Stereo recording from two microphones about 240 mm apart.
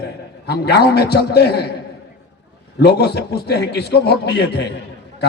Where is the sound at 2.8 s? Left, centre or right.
Left.